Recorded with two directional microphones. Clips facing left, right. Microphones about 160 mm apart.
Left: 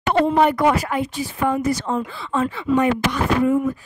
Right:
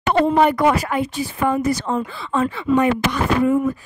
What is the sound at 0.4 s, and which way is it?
A woman's voice, 70° right (ahead or behind).